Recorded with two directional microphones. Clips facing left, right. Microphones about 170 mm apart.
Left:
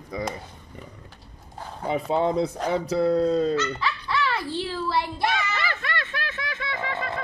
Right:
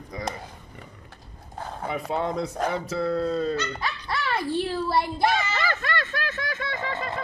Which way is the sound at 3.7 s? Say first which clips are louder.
Left 3 dB; 45° right (ahead or behind).